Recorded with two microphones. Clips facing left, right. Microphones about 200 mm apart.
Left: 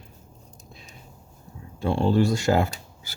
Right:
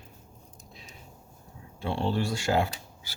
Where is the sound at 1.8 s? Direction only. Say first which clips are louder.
Left 7 dB; 45° left (ahead or behind).